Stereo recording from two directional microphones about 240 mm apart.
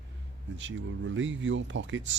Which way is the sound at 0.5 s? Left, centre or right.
Right.